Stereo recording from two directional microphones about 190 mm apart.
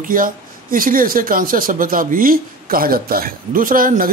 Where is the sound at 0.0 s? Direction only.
45° right (ahead or behind).